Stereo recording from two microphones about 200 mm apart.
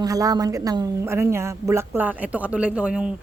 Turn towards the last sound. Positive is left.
turn(degrees=-5)  # may be behind; listen again after turning